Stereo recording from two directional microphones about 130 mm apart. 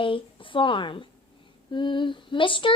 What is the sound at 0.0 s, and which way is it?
Speech, 40° left (ahead or behind).